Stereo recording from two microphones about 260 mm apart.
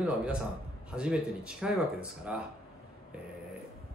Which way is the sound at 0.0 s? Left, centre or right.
Centre.